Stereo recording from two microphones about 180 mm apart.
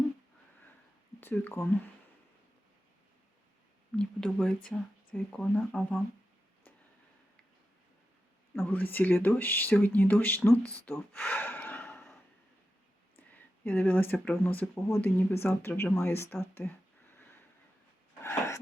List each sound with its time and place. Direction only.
1.2 s speech: 10° left (ahead or behind)
3.9 s speech: 5° left (ahead or behind)
8.5 s speech: 10° left (ahead or behind)
10.8 s gasp: 10° left (ahead or behind)
13.1 s speech: 10° left (ahead or behind)
18.2 s a sound: 15° left (ahead or behind)